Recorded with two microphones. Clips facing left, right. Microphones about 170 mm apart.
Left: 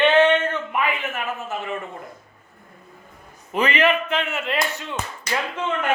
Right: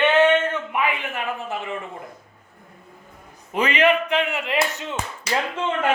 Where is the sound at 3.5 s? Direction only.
15° right (ahead or behind).